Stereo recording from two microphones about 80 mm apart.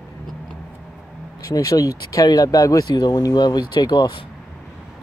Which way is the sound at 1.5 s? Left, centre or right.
Left.